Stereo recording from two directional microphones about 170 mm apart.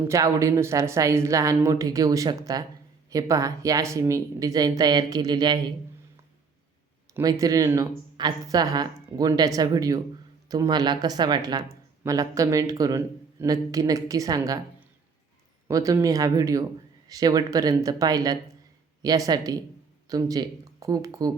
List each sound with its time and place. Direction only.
0.1 s a woman's voice: 20° right (ahead or behind)
7.1 s a woman's voice: 20° right (ahead or behind)
15.6 s a woman's voice: 20° right (ahead or behind)